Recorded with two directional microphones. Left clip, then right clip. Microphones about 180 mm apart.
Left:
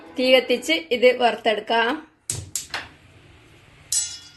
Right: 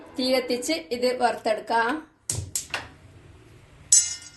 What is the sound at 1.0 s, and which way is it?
Speech, 30° left (ahead or behind).